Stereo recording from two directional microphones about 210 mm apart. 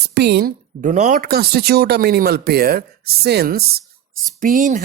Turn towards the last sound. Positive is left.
turn(degrees=-40)  # may be behind; listen again after turning